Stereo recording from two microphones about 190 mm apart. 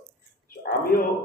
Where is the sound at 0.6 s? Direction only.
50° left (ahead or behind).